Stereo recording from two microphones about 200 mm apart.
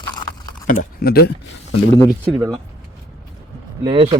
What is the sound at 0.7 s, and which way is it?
Speech, 45° left (ahead or behind).